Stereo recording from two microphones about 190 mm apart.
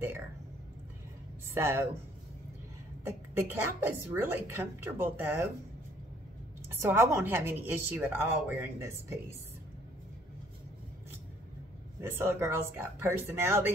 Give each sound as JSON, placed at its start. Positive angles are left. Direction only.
{"t": 1.6, "sound": "speech", "side_deg": -10}
{"t": 3.0, "sound": "speech", "side_deg": -15}
{"t": 6.7, "sound": "speech", "side_deg": -10}
{"t": 12.0, "sound": "speech", "side_deg": -10}